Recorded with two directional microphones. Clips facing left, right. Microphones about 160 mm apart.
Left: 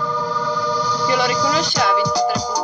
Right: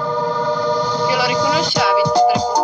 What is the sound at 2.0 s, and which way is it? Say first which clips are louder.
Music: right 5 dB; 50° right (ahead or behind).